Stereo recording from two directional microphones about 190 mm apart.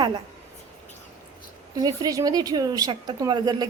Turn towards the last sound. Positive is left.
turn(degrees=-20)  # may be behind; listen again after turning